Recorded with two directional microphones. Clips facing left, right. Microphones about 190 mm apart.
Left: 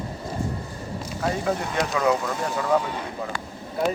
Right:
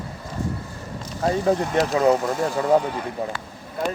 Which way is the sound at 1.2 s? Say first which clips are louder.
Right 5 dB; 35° right (ahead or behind).